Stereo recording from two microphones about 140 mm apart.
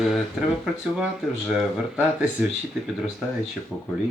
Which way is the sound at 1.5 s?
5° right (ahead or behind).